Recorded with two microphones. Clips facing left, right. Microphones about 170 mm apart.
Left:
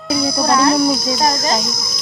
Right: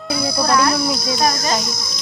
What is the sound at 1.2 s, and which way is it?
Insect, 25° left (ahead or behind).